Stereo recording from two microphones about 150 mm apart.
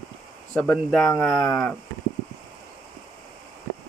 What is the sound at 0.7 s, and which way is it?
Speech, 5° left (ahead or behind).